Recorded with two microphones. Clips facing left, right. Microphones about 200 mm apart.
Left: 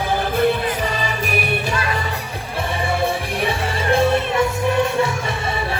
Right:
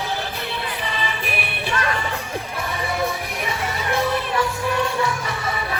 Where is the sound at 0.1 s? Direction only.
50° left (ahead or behind).